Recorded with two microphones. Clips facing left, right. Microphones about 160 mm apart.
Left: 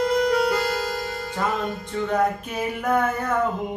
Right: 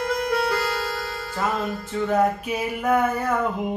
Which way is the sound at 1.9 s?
5° right (ahead or behind).